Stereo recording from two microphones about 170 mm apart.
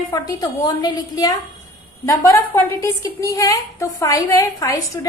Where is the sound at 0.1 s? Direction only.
25° left (ahead or behind).